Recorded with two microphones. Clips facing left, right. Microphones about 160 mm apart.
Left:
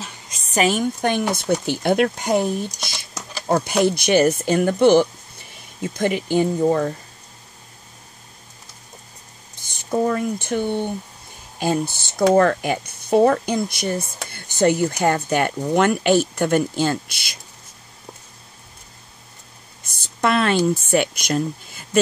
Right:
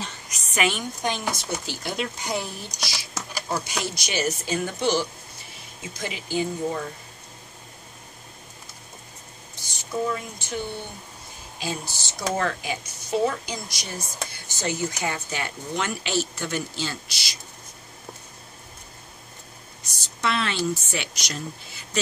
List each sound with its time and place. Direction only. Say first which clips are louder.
0.3 s a sound: left 6 dB; 35° left (ahead or behind)
1.0 s speech: left 5 dB; 60° left (ahead or behind)
9.6 s speech: left 7 dB; 55° left (ahead or behind)
19.8 s speech: left 7 dB; 55° left (ahead or behind)